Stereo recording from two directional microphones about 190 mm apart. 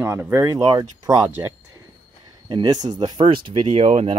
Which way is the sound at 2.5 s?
20° right (ahead or behind).